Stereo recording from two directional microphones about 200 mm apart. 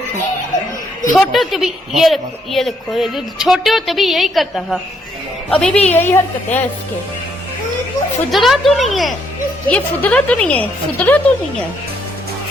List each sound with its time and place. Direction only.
1.1 s a woman's voice: centre (ahead or behind)
8.3 s a woman's voice: centre (ahead or behind)